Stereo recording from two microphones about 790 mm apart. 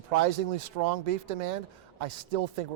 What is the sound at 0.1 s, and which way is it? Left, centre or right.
Speech, right.